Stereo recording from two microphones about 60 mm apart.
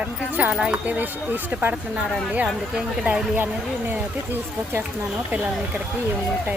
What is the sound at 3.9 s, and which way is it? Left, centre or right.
Speech, right.